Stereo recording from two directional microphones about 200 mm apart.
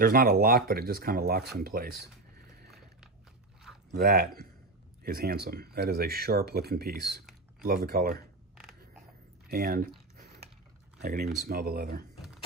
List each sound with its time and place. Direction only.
0.0 s speech: 50° right (ahead or behind)
2.3 s a sound: 50° right (ahead or behind)
3.9 s speech: 50° right (ahead or behind)
9.5 s biting: 50° right (ahead or behind)
11.0 s speech: 45° right (ahead or behind)